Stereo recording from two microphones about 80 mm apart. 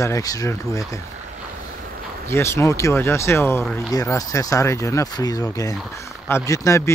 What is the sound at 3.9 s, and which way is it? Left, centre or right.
Speech, left.